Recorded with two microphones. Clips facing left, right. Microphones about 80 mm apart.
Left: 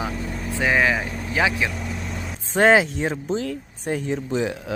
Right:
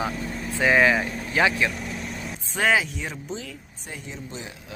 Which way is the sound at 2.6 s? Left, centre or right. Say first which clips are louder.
Left 6 dB; left.